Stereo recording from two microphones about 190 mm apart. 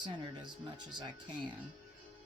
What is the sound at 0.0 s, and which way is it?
Speech, 25° right (ahead or behind).